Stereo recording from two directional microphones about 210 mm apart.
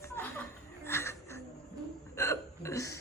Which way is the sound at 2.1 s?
15° left (ahead or behind).